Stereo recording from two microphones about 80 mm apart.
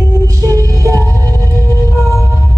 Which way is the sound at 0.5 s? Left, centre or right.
Right.